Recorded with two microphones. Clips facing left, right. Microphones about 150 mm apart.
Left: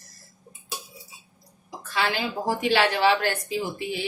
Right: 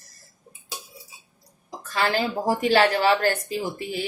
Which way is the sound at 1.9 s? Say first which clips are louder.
Right 3 dB; 40° right (ahead or behind).